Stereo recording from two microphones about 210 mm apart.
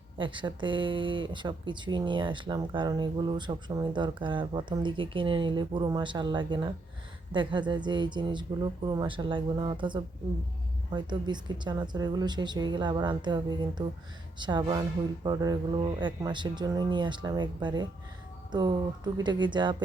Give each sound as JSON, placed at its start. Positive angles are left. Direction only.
{"t": 0.2, "sound": "speech", "side_deg": -25}